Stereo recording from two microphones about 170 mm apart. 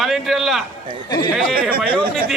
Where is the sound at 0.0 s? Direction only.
Centre (ahead or behind).